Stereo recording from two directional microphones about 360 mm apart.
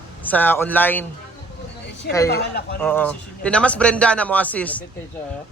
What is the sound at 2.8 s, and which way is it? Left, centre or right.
A man's voice, centre.